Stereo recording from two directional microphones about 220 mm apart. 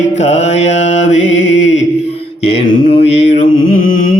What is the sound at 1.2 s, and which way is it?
Music, 55° left (ahead or behind).